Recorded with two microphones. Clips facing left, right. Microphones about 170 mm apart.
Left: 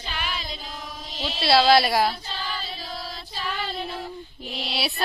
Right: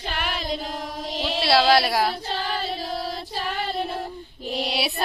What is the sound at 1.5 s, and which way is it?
Music, 10° right (ahead or behind).